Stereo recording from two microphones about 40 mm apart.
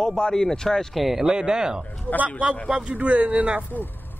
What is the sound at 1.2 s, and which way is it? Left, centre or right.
Speech, right.